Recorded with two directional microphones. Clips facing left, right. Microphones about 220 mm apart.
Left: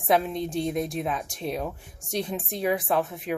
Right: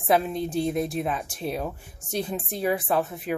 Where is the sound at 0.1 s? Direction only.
5° right (ahead or behind).